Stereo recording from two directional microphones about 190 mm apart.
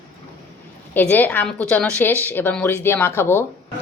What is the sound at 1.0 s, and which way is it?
A woman's voice, 10° left (ahead or behind).